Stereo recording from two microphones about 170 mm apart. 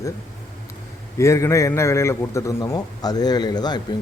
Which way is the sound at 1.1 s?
15° left (ahead or behind).